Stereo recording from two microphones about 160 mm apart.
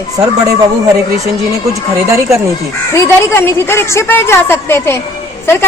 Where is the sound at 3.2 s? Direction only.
15° left (ahead or behind).